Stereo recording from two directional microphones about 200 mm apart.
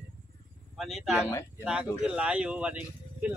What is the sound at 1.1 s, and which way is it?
Speech, 15° left (ahead or behind).